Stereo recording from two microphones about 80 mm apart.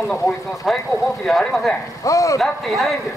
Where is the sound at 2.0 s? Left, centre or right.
Left.